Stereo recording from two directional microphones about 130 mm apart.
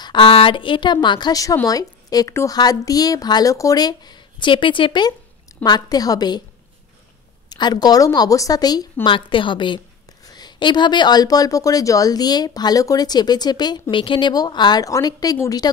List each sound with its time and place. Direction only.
0.0 s a woman's voice: 40° left (ahead or behind)
7.4 s a woman's voice: 35° left (ahead or behind)